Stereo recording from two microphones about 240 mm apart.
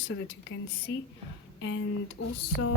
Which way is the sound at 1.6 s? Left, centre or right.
Left.